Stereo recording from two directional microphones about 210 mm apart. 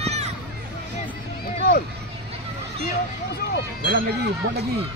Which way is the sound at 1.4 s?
50° left (ahead or behind).